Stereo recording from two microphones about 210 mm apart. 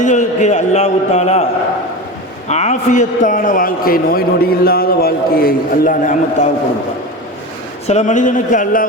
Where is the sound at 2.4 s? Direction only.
30° left (ahead or behind).